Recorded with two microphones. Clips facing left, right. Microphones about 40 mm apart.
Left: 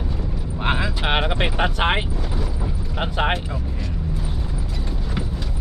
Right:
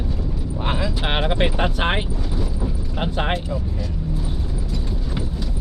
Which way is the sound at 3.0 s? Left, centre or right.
Left.